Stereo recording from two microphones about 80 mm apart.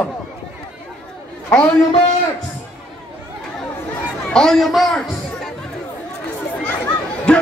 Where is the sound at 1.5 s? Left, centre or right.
Centre.